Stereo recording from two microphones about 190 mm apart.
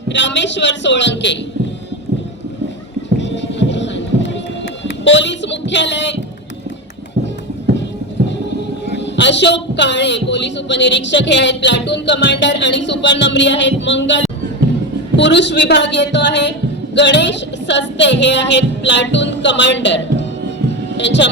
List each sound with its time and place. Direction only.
0.1 s speech: 70° left (ahead or behind)
3.2 s music: 70° left (ahead or behind)
5.0 s a woman's voice: 70° left (ahead or behind)
9.0 s a woman's voice: 65° left (ahead or behind)